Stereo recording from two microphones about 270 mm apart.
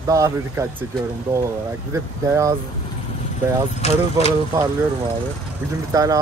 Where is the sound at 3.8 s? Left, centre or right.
Left.